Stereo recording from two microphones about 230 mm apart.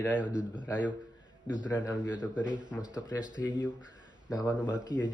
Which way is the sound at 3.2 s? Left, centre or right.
Centre.